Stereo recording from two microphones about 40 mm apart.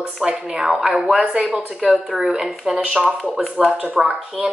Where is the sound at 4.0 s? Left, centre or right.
Right.